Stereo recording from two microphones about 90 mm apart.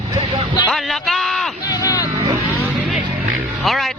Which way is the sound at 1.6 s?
45° left (ahead or behind).